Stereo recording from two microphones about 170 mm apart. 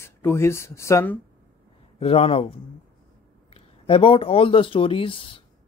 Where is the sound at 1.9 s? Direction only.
35° left (ahead or behind).